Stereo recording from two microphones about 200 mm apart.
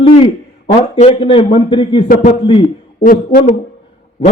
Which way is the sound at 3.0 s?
40° left (ahead or behind).